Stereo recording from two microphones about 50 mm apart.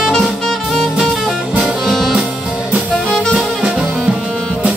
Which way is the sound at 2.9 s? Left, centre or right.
Centre.